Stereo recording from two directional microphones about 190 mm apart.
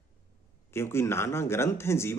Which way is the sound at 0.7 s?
15° left (ahead or behind).